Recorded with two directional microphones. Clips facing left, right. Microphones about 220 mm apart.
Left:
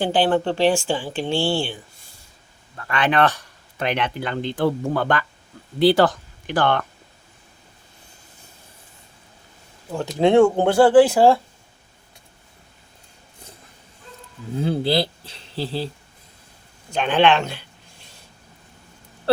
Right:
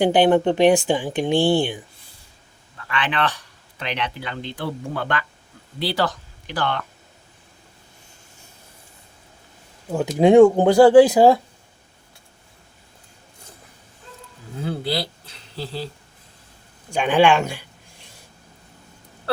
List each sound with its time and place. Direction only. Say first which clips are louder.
0.0 s speech: right 4 dB; 20° right (ahead or behind)
2.7 s speech: left 5 dB; 45° left (ahead or behind)
10.2 s speech: right 3 dB; 15° right (ahead or behind)
14.6 s speech: left 5 dB; 25° left (ahead or behind)
16.9 s speech: right 1 dB; 10° right (ahead or behind)